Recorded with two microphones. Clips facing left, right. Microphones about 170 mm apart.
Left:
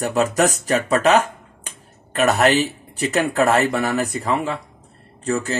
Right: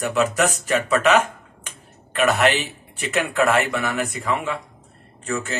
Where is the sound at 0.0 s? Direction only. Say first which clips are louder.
Left 2 dB; 40° left (ahead or behind).